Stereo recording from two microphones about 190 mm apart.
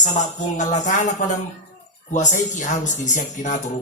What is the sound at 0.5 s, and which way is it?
Speech, 40° left (ahead or behind).